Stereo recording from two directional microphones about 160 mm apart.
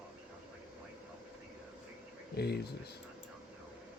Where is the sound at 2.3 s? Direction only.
90° left.